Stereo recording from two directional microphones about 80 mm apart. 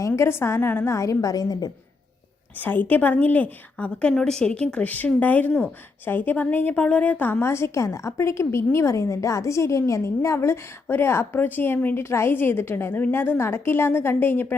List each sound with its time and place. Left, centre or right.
0.2 s a woman's voice: left
2.6 s a woman's voice: left